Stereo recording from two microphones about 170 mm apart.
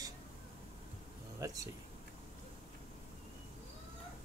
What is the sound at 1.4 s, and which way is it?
Speech, 20° right (ahead or behind).